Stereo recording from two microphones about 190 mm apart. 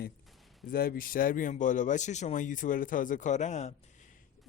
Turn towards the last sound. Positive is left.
turn(degrees=40)  # may be behind; listen again after turning